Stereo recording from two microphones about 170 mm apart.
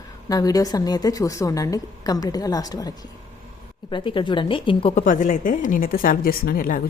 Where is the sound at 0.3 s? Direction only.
20° left (ahead or behind).